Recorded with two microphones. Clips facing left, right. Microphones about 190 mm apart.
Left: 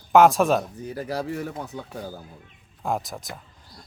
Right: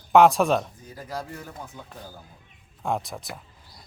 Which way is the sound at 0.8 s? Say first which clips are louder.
Left 7 dB; 70° left (ahead or behind).